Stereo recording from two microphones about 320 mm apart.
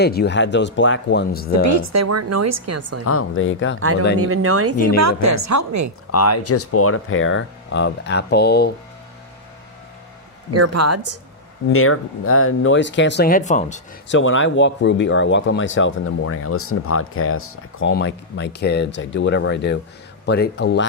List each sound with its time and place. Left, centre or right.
0.0 s speech: left
1.6 s a woman's voice: right
3.0 s speech: left
4.2 s a woman's voice: right
4.9 s a woman's voice: right
6.1 s speech: left
10.5 s a woman's voice: right
11.7 s speech: left
14.1 s speech: left